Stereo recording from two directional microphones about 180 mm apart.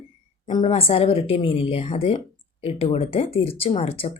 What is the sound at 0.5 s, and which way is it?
Speech, 30° left (ahead or behind).